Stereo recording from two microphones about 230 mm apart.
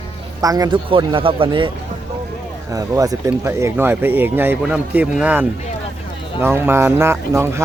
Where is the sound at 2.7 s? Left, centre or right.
Centre.